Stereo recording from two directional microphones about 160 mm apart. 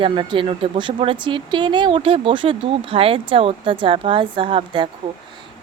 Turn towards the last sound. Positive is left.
turn(degrees=-30)  # may be behind; listen again after turning